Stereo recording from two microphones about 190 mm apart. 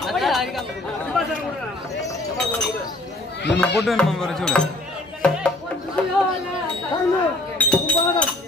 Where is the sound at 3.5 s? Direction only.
5° left (ahead or behind).